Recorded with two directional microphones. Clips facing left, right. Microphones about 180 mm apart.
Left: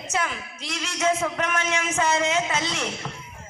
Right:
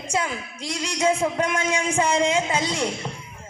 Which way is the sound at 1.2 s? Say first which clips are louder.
Right 3 dB; 30° right (ahead or behind).